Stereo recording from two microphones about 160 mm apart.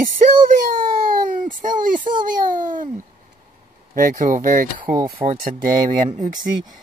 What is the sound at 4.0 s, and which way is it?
Speech, 60° right (ahead or behind).